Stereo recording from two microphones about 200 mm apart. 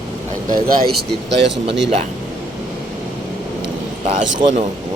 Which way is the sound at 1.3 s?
60° right (ahead or behind).